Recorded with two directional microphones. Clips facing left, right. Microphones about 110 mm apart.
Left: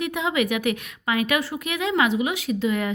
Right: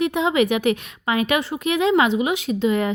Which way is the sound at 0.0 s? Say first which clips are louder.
Right 5 dB; 30° right (ahead or behind).